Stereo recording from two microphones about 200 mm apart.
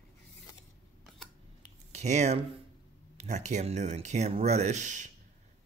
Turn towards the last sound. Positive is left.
turn(degrees=-35)  # may be behind; listen again after turning